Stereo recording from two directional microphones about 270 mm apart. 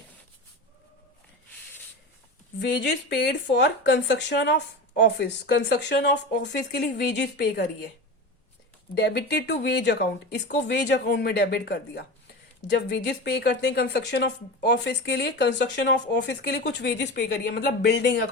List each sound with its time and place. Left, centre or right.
2.6 s a woman's voice: left
9.0 s a woman's voice: left